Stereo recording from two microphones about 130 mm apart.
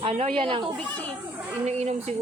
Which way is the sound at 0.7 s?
10° left (ahead or behind).